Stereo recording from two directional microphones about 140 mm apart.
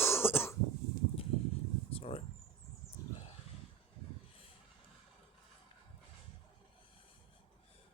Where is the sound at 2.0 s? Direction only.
45° left (ahead or behind).